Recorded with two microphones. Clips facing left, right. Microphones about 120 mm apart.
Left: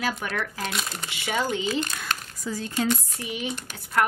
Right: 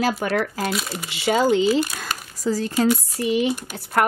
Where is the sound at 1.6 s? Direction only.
10° right (ahead or behind).